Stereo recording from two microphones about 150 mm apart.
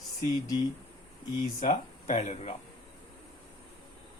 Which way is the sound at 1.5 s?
55° left (ahead or behind).